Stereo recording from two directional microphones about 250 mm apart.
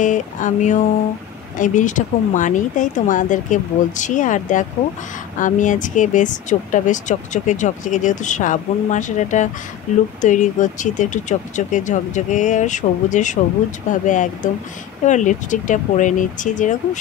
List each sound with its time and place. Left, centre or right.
0.0 s speech: left